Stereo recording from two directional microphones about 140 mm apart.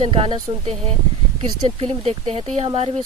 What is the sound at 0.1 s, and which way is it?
Speech, 40° right (ahead or behind).